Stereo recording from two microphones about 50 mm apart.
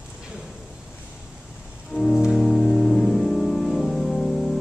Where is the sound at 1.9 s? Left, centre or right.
Right.